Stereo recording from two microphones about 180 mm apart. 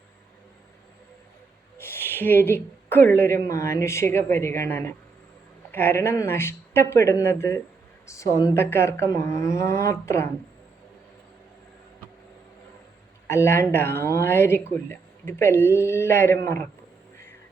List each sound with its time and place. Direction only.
1.8 s a woman's voice: 10° left (ahead or behind)
13.2 s speech: 15° left (ahead or behind)